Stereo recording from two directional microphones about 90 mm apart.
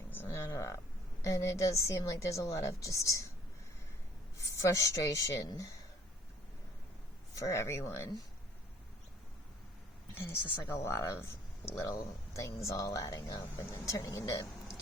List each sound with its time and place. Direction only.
0.1 s speech: 25° left (ahead or behind)
4.5 s speech: 35° left (ahead or behind)
7.3 s speech: 40° left (ahead or behind)
10.2 s speech: 25° left (ahead or behind)